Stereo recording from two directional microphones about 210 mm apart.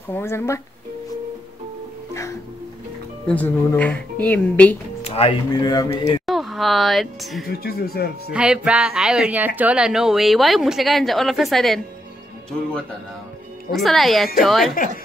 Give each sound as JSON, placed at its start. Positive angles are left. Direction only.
{"t": 0.1, "sound": "speech", "side_deg": 10}
{"t": 3.3, "sound": "speech", "side_deg": 5}
{"t": 5.0, "sound": "speech", "side_deg": 25}
{"t": 6.2, "sound": "speech", "side_deg": 0}
{"t": 7.6, "sound": "speech", "side_deg": 50}
{"t": 8.3, "sound": "speech", "side_deg": -5}
{"t": 13.7, "sound": "speech", "side_deg": 0}